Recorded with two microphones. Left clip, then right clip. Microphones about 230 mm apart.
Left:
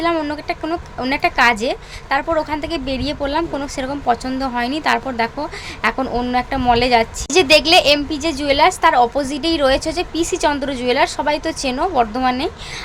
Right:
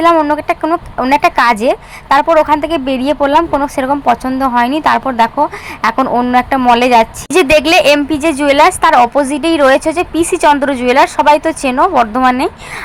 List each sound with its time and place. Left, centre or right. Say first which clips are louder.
0.0 s a woman's voice: right 10 dB; centre